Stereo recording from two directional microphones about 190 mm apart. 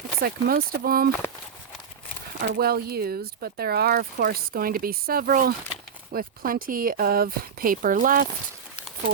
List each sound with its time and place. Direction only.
0.2 s speech: 50° right (ahead or behind)
2.5 s speech: 55° right (ahead or behind)